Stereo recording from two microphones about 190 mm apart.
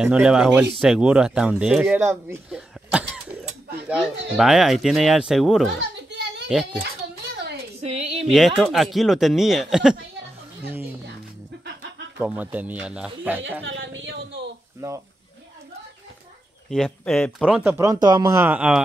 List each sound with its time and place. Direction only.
0.0 s speech: 5° right (ahead or behind)
2.2 s throat clearing: 5° right (ahead or behind)
3.8 s speech: 5° right (ahead or behind)
6.1 s a sound: 65° right (ahead or behind)
7.8 s a sound: 30° right (ahead or behind)
8.3 s speech: centre (ahead or behind)
12.2 s speech: 10° right (ahead or behind)
13.4 s a woman's voice: 75° right (ahead or behind)
14.8 s speech: 15° right (ahead or behind)
16.7 s speech: centre (ahead or behind)
17.5 s speech: 5° right (ahead or behind)
18.4 s speech: 5° right (ahead or behind)